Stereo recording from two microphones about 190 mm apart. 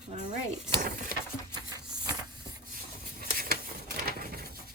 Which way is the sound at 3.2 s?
50° right (ahead or behind).